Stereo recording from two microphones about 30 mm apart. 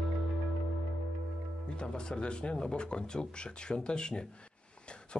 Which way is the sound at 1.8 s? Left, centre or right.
Left.